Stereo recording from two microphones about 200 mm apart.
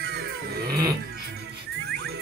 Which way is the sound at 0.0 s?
55° right (ahead or behind).